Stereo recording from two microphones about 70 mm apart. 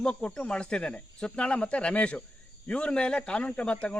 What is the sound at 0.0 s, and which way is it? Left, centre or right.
A man's voice, centre.